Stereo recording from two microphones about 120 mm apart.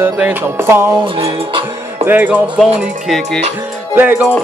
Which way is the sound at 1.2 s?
55° right (ahead or behind).